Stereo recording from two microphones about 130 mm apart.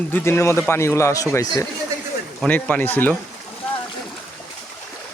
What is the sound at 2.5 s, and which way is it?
Speech, 10° left (ahead or behind).